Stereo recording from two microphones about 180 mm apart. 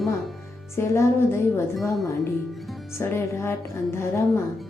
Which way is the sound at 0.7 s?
15° left (ahead or behind).